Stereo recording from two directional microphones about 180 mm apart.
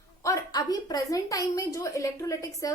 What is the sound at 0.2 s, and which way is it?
A woman's voice, 20° left (ahead or behind).